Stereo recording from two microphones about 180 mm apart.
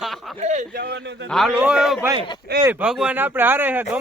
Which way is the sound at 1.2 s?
Centre (ahead or behind).